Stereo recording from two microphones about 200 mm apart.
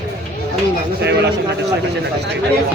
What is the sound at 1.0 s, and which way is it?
Speech, 55° right (ahead or behind).